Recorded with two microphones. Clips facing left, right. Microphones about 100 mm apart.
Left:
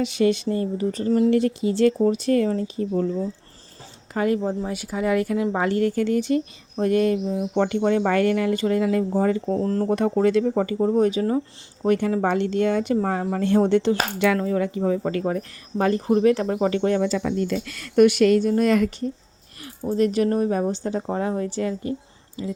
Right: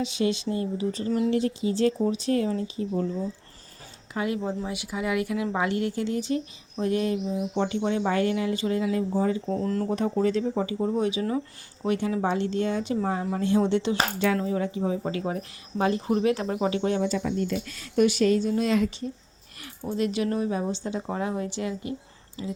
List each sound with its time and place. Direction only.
0.0 s a woman's voice: 55° left (ahead or behind)
1.6 s speech: 60° left (ahead or behind)
4.1 s speech: 45° left (ahead or behind); by 9.4 s 60° left (ahead or behind)
9.5 s speech: 35° left (ahead or behind)
9.9 s speech: 65° left (ahead or behind)
10.5 s a woman's voice: 55° left (ahead or behind)
14.4 s a woman's voice: 65° left (ahead or behind); by 17.0 s 45° left (ahead or behind)
17.0 s a woman's voice: 90° left; by 21.9 s 40° left (ahead or behind)